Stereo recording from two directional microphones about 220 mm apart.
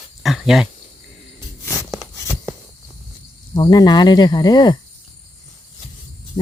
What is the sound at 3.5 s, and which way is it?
Speech, 20° left (ahead or behind).